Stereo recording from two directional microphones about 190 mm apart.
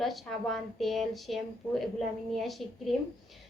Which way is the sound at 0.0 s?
Centre (ahead or behind).